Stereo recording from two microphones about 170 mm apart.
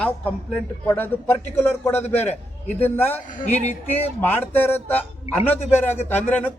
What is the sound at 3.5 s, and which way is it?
Speech, 40° left (ahead or behind).